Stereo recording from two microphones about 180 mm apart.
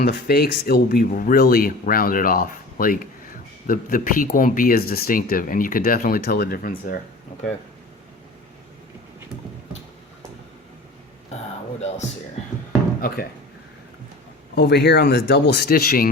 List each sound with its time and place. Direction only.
0.0 s speech: 60° left (ahead or behind)
13.0 s speech: 60° left (ahead or behind)
14.5 s speech: 65° left (ahead or behind)